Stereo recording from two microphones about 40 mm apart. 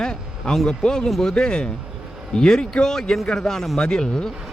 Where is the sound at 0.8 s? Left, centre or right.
Centre.